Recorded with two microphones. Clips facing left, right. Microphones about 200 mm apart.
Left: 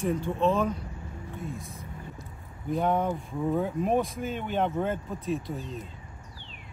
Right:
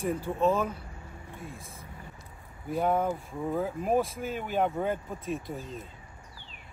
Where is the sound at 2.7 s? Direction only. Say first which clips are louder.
Left 1 dB; 5° right (ahead or behind).